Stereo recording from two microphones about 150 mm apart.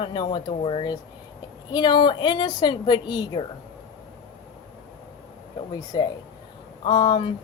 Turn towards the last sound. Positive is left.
turn(degrees=35)  # may be behind; listen again after turning